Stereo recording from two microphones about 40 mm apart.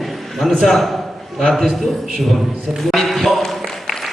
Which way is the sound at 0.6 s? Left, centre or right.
Centre.